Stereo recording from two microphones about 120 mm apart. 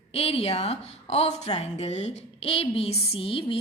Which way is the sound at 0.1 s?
55° left (ahead or behind).